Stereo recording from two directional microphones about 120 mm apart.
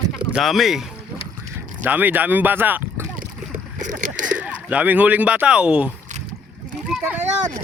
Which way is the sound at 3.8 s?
90° right.